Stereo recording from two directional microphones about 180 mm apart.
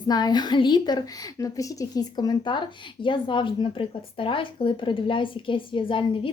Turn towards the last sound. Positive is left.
turn(degrees=30)  # may be behind; listen again after turning